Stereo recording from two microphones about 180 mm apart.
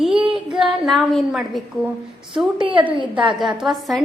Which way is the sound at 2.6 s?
25° right (ahead or behind).